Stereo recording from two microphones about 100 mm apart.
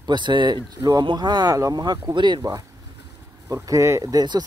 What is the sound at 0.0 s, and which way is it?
Speech, 50° right (ahead or behind).